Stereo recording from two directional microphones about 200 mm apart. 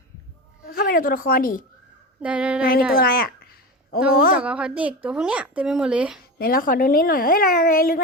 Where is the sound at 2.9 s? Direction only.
50° left (ahead or behind).